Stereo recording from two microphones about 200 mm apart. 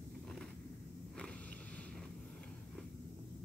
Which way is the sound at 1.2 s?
5° left (ahead or behind).